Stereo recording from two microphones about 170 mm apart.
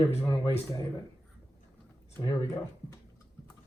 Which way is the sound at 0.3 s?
25° left (ahead or behind).